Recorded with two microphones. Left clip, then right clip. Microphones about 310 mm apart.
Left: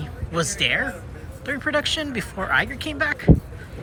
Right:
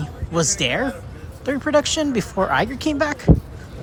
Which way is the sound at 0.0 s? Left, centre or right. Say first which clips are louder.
Right 4 dB; centre.